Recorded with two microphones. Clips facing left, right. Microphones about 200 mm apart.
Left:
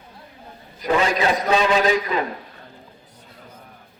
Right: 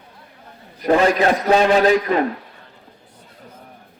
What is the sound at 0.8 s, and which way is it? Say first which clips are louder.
A man's voice: right 5 dB; 45° right (ahead or behind).